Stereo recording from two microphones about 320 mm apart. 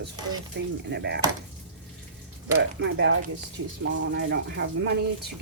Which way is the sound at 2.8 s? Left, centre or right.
Right.